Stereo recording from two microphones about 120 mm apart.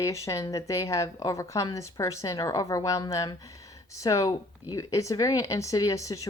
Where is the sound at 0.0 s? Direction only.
25° left (ahead or behind).